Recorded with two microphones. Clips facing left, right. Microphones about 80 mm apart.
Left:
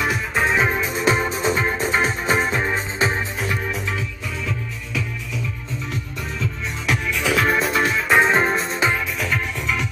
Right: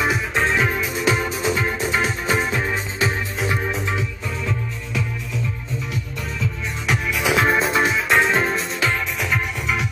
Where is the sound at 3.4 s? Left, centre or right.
Right.